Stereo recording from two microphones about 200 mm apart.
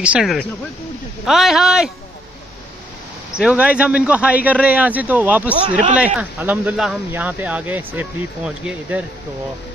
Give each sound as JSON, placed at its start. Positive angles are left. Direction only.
{"t": 0.0, "sound": "a man's voice", "side_deg": -5}
{"t": 3.3, "sound": "speech", "side_deg": -5}
{"t": 5.7, "sound": "speech", "side_deg": -35}
{"t": 5.9, "sound": "speech", "side_deg": -5}